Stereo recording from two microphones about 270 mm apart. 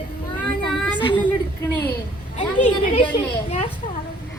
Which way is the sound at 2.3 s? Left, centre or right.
Left.